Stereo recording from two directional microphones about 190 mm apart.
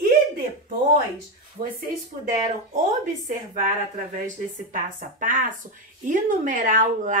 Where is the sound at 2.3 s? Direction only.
40° right (ahead or behind).